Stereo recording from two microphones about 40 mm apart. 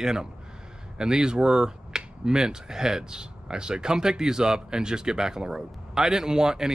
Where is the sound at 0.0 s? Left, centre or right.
Centre.